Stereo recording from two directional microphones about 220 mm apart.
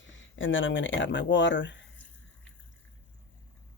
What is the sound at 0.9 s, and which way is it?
Speech, 55° left (ahead or behind).